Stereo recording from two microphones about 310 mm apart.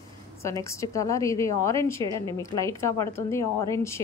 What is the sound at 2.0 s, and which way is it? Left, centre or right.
Speech, centre.